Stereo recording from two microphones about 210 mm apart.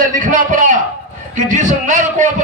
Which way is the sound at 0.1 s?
35° right (ahead or behind).